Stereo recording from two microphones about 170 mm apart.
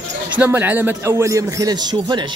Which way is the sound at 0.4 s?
10° right (ahead or behind).